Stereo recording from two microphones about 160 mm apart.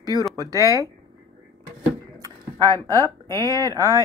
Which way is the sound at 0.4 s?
20° right (ahead or behind).